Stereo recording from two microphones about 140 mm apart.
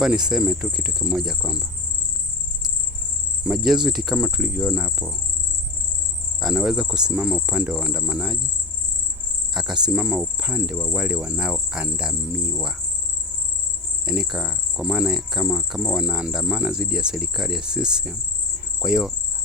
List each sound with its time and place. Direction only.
0.0 s cricket: 5° right (ahead or behind)
3.4 s cricket: centre (ahead or behind)
6.4 s cricket: 5° right (ahead or behind)
9.6 s cricket: 5° right (ahead or behind)
14.0 s cricket: 5° right (ahead or behind)